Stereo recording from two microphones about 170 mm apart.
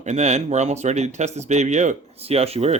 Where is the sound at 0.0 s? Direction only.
40° right (ahead or behind).